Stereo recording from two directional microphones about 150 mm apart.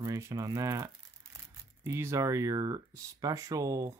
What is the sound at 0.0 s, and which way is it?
Speech, 25° right (ahead or behind).